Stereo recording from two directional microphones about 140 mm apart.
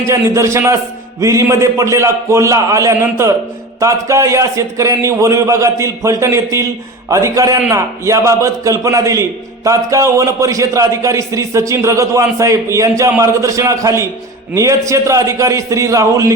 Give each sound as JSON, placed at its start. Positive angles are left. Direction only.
{"t": 0.1, "sound": "a man's voice", "side_deg": -20}